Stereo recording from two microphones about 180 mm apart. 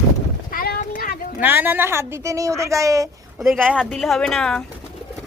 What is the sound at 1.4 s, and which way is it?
A child's voice, 10° right (ahead or behind).